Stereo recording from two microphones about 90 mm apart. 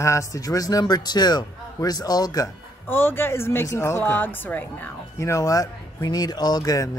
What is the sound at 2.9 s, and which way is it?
Speech, 25° left (ahead or behind).